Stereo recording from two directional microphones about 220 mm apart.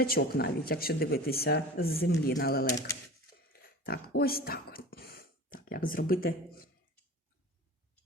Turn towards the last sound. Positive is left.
turn(degrees=40)  # may be behind; listen again after turning